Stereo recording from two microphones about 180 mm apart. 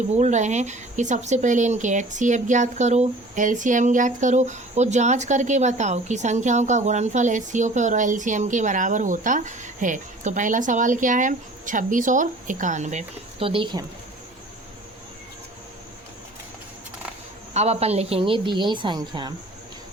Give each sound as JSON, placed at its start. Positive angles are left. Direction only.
{"t": 0.1, "sound": "speech", "side_deg": -40}
{"t": 17.5, "sound": "a woman's voice", "side_deg": -35}